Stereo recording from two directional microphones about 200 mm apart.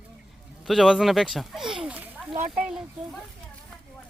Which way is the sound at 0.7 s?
Centre (ahead or behind).